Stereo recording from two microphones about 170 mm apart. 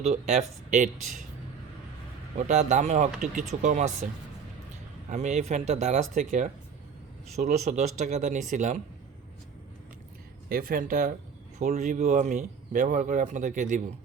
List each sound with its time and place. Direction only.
0.0 s a man's voice: 40° right (ahead or behind)
2.3 s a man's voice: 40° right (ahead or behind)
10.5 s a man's voice: 55° right (ahead or behind)